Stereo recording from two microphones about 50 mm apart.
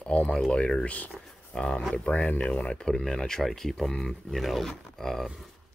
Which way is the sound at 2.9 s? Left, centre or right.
Centre.